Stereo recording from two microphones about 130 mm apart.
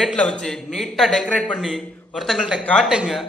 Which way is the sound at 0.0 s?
5° left (ahead or behind).